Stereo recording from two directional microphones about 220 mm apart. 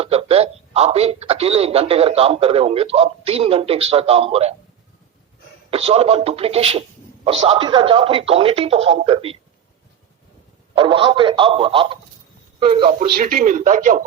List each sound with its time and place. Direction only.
0.0 s a man's voice: 25° right (ahead or behind)
5.7 s a man's voice: 25° right (ahead or behind)
10.8 s a man's voice: 25° right (ahead or behind)